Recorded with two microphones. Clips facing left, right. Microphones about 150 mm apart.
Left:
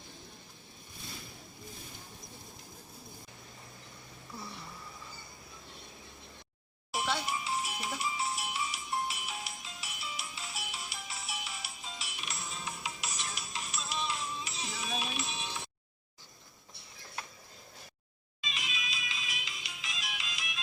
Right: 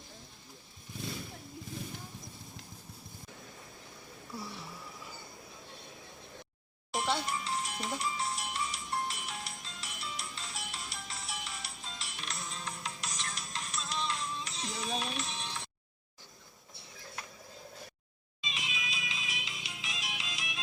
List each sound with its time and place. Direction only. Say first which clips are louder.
6.9 s music: right 1 dB; 5° left (ahead or behind)
18.4 s music: even; 20° right (ahead or behind)